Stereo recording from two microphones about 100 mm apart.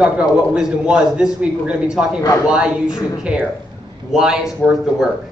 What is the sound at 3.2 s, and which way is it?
A man's voice, 10° right (ahead or behind).